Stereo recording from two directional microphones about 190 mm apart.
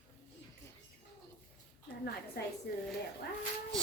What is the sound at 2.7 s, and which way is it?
Speech, 55° left (ahead or behind).